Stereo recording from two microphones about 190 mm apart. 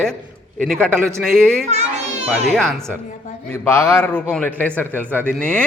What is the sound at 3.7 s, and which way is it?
A man's voice, 15° left (ahead or behind).